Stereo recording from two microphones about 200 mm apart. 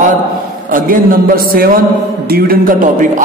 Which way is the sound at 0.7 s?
45° right (ahead or behind).